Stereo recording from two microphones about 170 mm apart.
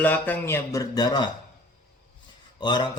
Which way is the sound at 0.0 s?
10° left (ahead or behind).